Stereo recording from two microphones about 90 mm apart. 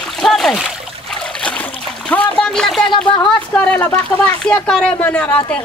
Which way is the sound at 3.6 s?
20° left (ahead or behind).